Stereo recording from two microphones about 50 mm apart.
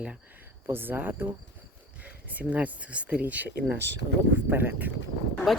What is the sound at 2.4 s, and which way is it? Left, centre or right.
Speech, right.